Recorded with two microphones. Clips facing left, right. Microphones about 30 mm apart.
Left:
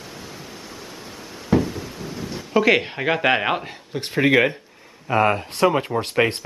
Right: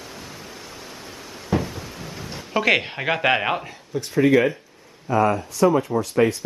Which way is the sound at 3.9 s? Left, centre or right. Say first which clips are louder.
Right 1 dB; left.